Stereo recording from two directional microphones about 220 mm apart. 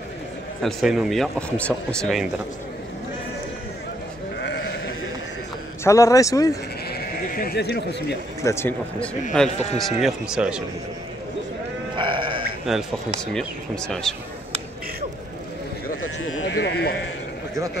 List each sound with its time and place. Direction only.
0.6 s speech: centre (ahead or behind)
5.9 s speech: 15° left (ahead or behind)
6.9 s speech: 45° left (ahead or behind)
8.5 s speech: 10° left (ahead or behind)
12.0 s sheep: 20° right (ahead or behind)
12.7 s speech: centre (ahead or behind)
16.2 s speech: 65° left (ahead or behind)